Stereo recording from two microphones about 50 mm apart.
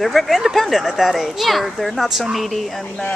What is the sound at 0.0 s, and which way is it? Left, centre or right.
Speech, centre.